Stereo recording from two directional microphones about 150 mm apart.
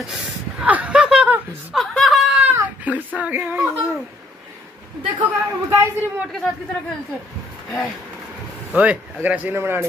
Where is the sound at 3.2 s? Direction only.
10° right (ahead or behind).